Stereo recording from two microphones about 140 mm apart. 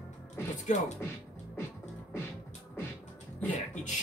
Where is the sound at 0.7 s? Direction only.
60° left (ahead or behind).